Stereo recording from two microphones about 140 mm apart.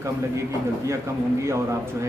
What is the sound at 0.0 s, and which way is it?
Speech, 20° right (ahead or behind).